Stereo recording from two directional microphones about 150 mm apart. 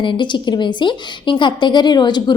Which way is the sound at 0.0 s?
35° left (ahead or behind).